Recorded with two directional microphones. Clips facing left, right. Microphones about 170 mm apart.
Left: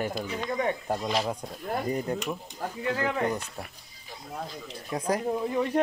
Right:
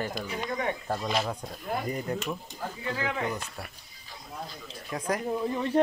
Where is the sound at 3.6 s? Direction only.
15° left (ahead or behind).